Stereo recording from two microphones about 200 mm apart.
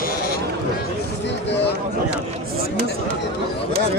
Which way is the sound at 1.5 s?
60° left (ahead or behind).